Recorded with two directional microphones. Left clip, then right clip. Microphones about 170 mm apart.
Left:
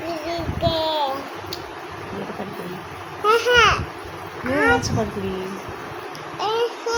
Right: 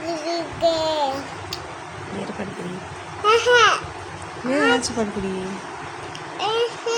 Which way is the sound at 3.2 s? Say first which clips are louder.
Even; 15° right (ahead or behind).